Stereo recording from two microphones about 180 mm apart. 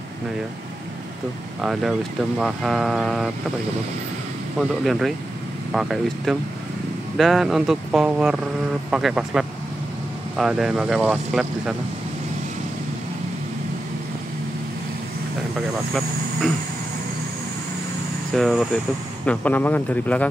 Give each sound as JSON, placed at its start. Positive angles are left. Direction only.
{"t": 1.6, "sound": "speech", "side_deg": 0}
{"t": 4.6, "sound": "speech", "side_deg": 0}
{"t": 18.3, "sound": "speech", "side_deg": 0}